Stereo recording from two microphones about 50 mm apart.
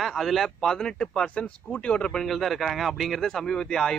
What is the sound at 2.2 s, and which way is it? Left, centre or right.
A man's voice, centre.